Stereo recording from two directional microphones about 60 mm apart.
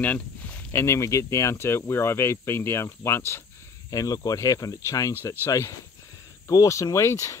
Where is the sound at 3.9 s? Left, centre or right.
Left.